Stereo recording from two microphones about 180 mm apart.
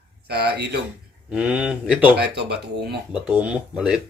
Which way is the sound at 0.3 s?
65° right (ahead or behind).